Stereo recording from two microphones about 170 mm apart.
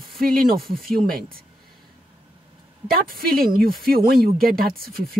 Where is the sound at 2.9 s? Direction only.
60° right (ahead or behind).